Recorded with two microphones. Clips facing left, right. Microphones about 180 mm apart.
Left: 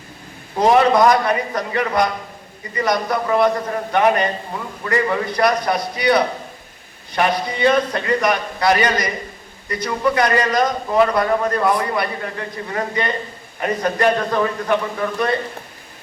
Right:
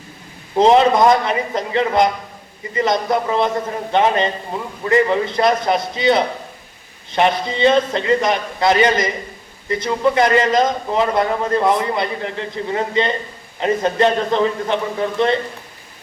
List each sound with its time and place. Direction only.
0.6 s a man's voice: 25° right (ahead or behind)